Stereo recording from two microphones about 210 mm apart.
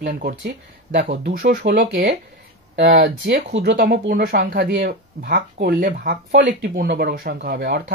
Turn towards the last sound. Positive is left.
turn(degrees=-50)  # may be behind; listen again after turning